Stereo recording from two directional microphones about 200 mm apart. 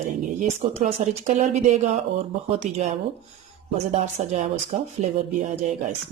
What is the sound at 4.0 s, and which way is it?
Speech, 35° right (ahead or behind).